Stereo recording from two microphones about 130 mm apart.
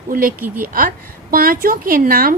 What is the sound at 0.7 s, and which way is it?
A woman's voice, 90° right.